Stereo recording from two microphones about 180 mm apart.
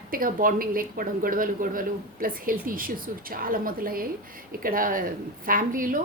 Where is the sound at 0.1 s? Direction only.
50° right (ahead or behind).